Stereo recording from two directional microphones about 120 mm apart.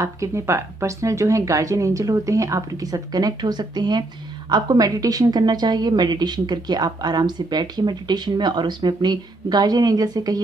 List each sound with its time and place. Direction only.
0.0 s a woman's voice: 25° right (ahead or behind)